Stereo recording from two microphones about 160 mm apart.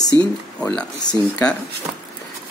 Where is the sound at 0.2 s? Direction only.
5° left (ahead or behind).